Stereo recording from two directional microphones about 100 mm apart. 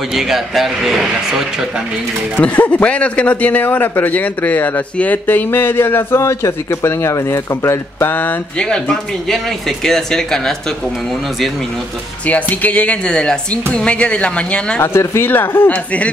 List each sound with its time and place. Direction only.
0.1 s speech: 5° right (ahead or behind)
2.3 s a man's voice: 15° left (ahead or behind)
8.6 s speech: 5° left (ahead or behind)
12.3 s speech: 15° left (ahead or behind)
14.8 s a man's voice: 25° left (ahead or behind)